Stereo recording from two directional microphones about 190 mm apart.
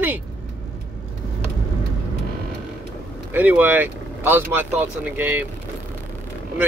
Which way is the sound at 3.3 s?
10° right (ahead or behind).